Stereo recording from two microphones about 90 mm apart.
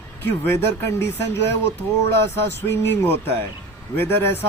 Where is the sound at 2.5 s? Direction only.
25° left (ahead or behind).